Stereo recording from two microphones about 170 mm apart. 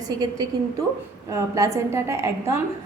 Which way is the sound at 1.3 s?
20° right (ahead or behind).